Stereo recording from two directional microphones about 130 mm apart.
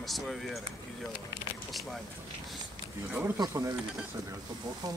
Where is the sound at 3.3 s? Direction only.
25° right (ahead or behind).